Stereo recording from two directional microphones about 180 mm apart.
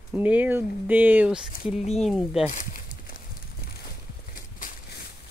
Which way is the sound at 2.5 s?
45° left (ahead or behind).